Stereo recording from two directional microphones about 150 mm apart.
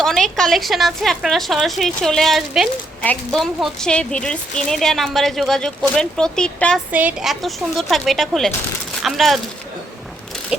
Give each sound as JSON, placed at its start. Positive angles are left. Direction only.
{"t": 0.0, "sound": "speech", "side_deg": 5}
{"t": 6.9, "sound": "speech", "side_deg": -5}